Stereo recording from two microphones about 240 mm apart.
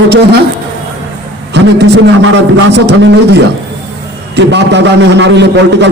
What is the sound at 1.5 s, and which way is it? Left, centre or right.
Speech, right.